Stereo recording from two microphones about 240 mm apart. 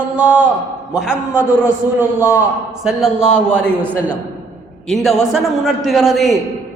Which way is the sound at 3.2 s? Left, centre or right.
Left.